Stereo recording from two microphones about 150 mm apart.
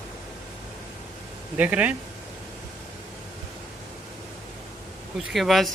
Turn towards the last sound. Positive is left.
turn(degrees=0)  # may be behind; listen again after turning